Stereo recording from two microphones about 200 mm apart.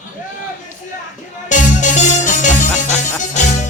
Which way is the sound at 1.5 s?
40° left (ahead or behind).